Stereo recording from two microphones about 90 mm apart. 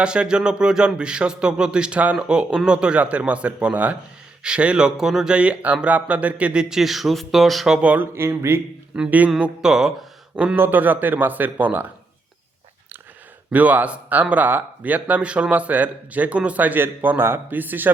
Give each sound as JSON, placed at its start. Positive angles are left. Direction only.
{"t": 0.0, "sound": "speech", "side_deg": -10}
{"t": 8.1, "sound": "speech", "side_deg": -30}
{"t": 9.0, "sound": "speech", "side_deg": -15}
{"t": 9.4, "sound": "speech", "side_deg": -5}
{"t": 13.5, "sound": "speech", "side_deg": -15}